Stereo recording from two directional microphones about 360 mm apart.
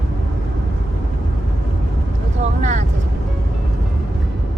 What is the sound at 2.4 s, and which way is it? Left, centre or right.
Vehicle, centre.